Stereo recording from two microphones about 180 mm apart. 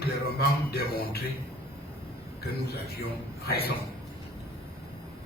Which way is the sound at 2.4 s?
60° left (ahead or behind).